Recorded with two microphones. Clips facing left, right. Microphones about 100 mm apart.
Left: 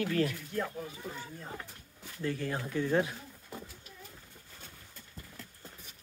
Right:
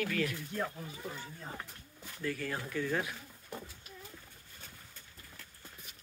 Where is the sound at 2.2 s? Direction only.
25° left (ahead or behind).